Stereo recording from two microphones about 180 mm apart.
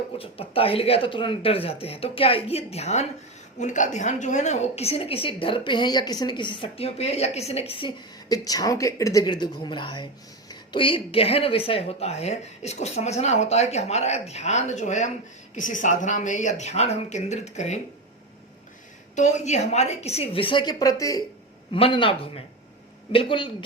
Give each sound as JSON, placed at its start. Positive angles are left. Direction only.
{"t": 0.2, "sound": "a woman's voice", "side_deg": 30}
{"t": 19.1, "sound": "speech", "side_deg": 40}
{"t": 21.7, "sound": "a woman's voice", "side_deg": 30}